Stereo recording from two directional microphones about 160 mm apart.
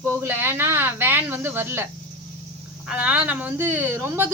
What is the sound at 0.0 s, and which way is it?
A woman's voice, 15° right (ahead or behind).